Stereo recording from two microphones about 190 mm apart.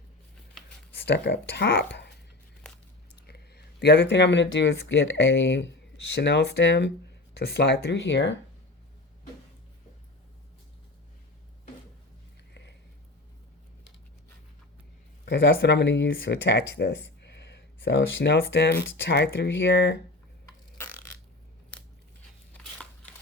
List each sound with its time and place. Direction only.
0.9 s speech: 65° left (ahead or behind)
3.2 s speech: 55° left (ahead or behind); by 5.7 s 75° left (ahead or behind)
6.1 s speech: 60° left (ahead or behind)
15.2 s speech: 60° left (ahead or behind)
20.7 s burping: 15° left (ahead or behind)